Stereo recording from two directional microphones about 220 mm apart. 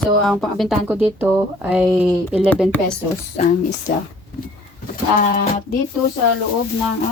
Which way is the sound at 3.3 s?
30° left (ahead or behind).